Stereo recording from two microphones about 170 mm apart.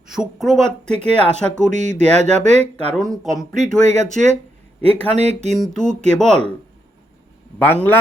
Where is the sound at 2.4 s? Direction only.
40° right (ahead or behind).